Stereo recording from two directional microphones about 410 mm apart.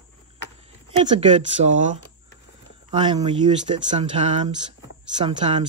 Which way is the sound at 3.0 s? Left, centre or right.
Centre.